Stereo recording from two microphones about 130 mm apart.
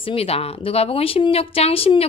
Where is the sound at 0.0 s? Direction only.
50° left (ahead or behind).